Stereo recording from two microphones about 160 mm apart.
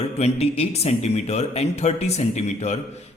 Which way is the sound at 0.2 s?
40° left (ahead or behind).